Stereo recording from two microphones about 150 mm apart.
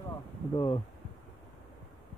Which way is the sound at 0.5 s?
30° left (ahead or behind).